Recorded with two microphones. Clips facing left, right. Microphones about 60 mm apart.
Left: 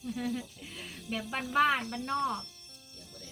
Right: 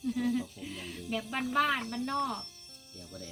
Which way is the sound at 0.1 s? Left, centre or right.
Centre.